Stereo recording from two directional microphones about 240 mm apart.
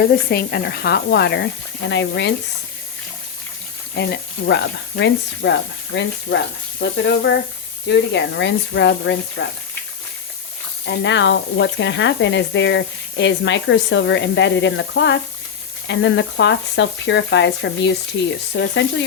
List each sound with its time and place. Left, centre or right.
0.1 s speech: left
3.9 s speech: left
10.8 s speech: left